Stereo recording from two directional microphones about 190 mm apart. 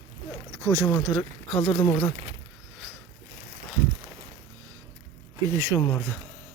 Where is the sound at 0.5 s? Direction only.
15° right (ahead or behind).